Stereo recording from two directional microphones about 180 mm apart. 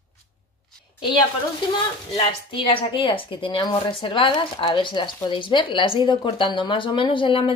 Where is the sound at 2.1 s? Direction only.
30° left (ahead or behind).